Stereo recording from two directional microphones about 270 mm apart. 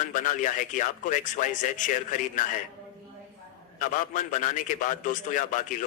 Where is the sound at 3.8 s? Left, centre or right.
Left.